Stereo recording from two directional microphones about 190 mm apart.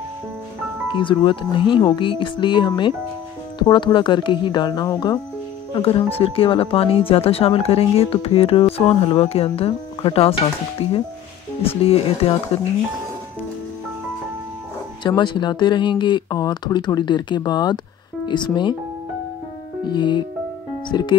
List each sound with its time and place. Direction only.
0.9 s speech: 25° left (ahead or behind)
15.0 s speech: 25° left (ahead or behind)
19.9 s speech: 25° left (ahead or behind)